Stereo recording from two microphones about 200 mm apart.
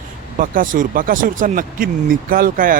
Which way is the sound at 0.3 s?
40° right (ahead or behind).